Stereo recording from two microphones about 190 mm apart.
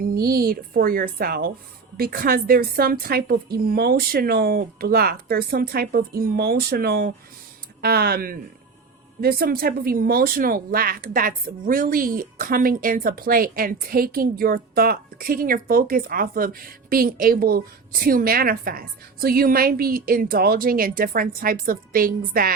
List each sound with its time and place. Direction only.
0.0 s a woman's voice: 50° right (ahead or behind)